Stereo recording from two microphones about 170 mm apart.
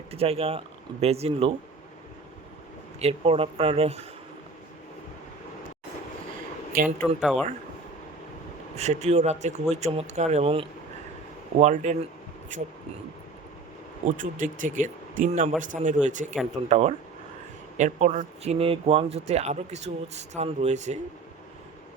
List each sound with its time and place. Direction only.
0.1 s speech: 35° right (ahead or behind)
3.0 s speech: 35° right (ahead or behind)
7.2 s speech: centre (ahead or behind)
8.7 s speech: 40° right (ahead or behind)
11.6 s speech: 45° right (ahead or behind)
14.2 s speech: 50° right (ahead or behind)